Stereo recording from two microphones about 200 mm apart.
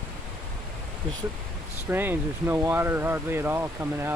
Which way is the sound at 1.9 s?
10° right (ahead or behind).